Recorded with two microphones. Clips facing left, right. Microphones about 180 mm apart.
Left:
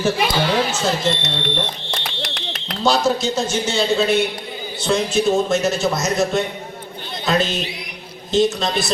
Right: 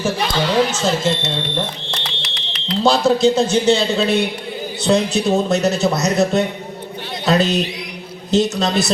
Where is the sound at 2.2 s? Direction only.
50° left (ahead or behind).